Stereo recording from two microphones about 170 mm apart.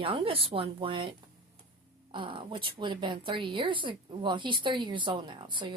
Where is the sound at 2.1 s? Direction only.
30° right (ahead or behind).